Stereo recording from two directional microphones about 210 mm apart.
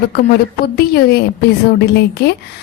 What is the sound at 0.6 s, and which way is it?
Speech, 50° left (ahead or behind).